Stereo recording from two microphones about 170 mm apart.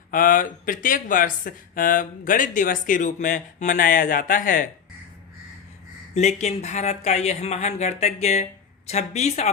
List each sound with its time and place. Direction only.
0.1 s speech: 50° left (ahead or behind)
6.1 s speech: 40° left (ahead or behind)